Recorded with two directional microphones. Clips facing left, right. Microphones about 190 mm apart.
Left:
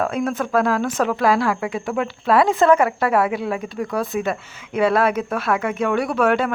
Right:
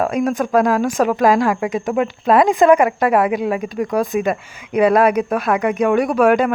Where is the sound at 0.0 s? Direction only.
15° right (ahead or behind).